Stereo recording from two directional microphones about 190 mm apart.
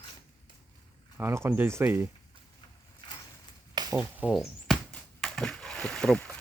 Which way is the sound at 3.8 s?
20° right (ahead or behind).